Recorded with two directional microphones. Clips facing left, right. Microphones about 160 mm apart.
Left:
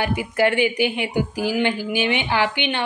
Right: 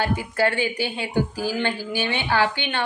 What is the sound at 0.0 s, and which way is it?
Speech, 15° left (ahead or behind).